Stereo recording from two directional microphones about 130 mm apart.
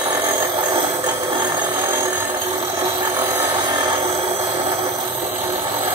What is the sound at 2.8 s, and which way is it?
Tools, 20° right (ahead or behind).